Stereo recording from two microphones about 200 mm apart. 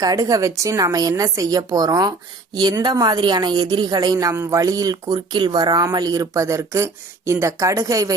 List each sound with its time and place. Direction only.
0.0 s a woman's voice: 15° right (ahead or behind)